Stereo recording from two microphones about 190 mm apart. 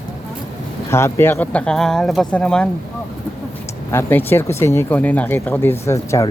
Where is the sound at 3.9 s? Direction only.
15° left (ahead or behind).